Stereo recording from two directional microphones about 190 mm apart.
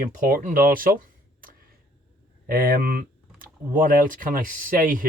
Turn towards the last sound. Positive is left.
turn(degrees=-45)  # may be behind; listen again after turning